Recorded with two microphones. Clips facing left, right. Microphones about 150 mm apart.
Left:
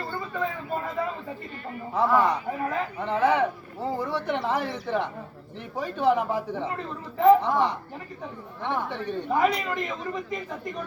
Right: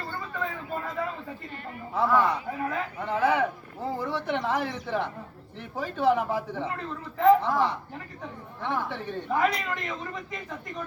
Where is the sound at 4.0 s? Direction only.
10° left (ahead or behind).